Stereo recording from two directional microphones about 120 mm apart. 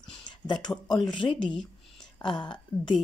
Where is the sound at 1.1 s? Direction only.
45° left (ahead or behind).